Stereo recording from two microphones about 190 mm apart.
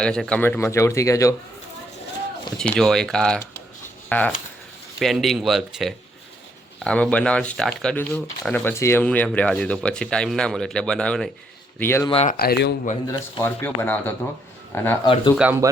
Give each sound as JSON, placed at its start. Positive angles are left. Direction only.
{"t": 0.0, "sound": "speech", "side_deg": 5}
{"t": 2.6, "sound": "speech", "side_deg": 5}
{"t": 12.0, "sound": "speech", "side_deg": 30}
{"t": 12.3, "sound": "speech", "side_deg": 55}
{"t": 13.1, "sound": "speech", "side_deg": 15}
{"t": 15.0, "sound": "speech", "side_deg": 25}
{"t": 15.4, "sound": "speech", "side_deg": -10}